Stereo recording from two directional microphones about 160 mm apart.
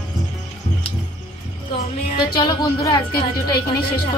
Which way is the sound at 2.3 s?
25° left (ahead or behind).